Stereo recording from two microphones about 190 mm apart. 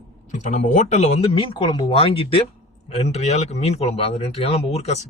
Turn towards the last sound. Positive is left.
turn(degrees=35)  # may be behind; listen again after turning